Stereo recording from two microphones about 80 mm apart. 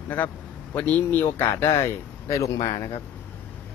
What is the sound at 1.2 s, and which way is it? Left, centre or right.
Speech, left.